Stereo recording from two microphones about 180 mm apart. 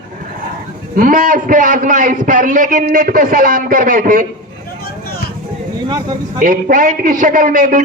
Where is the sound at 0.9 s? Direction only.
50° right (ahead or behind).